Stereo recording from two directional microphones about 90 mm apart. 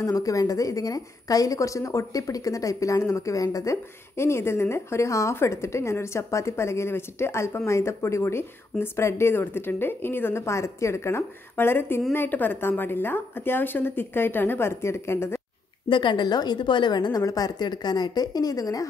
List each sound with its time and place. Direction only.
0.0 s a woman's voice: 40° left (ahead or behind)
15.9 s a woman's voice: 60° left (ahead or behind); by 18.9 s 40° left (ahead or behind)